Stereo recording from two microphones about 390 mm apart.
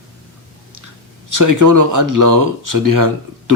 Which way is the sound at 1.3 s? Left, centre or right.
Right.